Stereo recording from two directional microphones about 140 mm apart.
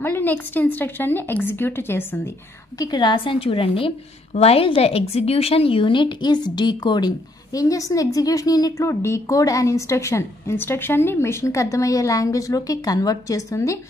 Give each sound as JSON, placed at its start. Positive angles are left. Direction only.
{"t": 0.0, "sound": "a woman's voice", "side_deg": 15}
{"t": 2.8, "sound": "a woman's voice", "side_deg": 30}